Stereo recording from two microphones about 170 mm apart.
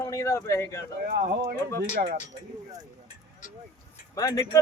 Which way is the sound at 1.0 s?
55° right (ahead or behind).